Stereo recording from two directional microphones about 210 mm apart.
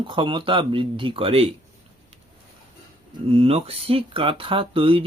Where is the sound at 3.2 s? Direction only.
30° right (ahead or behind).